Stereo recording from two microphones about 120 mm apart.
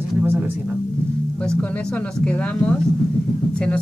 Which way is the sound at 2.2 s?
10° left (ahead or behind).